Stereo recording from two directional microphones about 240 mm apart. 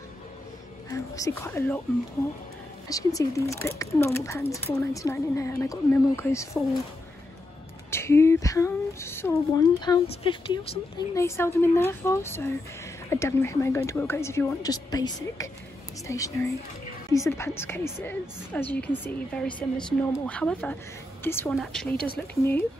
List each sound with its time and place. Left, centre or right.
0.8 s speech: centre
2.9 s speech: centre
7.9 s speech: centre
11.1 s speech: centre
22.0 s speech: left
22.4 s speech: centre